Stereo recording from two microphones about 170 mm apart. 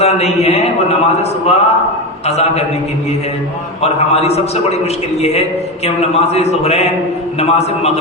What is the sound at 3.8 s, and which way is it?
A man's voice, 40° left (ahead or behind).